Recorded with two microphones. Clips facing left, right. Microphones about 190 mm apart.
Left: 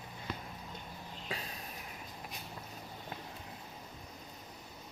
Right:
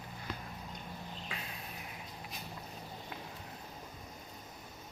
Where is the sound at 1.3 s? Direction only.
35° left (ahead or behind).